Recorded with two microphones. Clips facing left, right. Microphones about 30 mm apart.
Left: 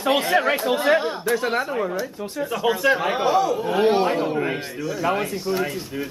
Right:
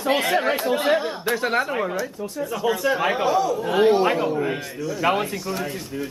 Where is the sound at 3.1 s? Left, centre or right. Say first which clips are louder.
Left 1 dB; centre.